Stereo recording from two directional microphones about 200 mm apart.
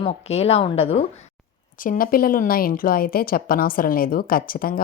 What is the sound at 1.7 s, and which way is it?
A woman's voice, 45° left (ahead or behind).